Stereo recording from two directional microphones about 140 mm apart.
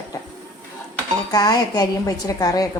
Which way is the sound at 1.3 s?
30° left (ahead or behind).